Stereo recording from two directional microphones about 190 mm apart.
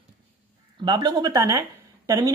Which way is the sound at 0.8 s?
20° right (ahead or behind).